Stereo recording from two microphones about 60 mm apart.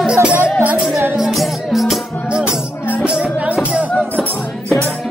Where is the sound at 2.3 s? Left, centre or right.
Centre.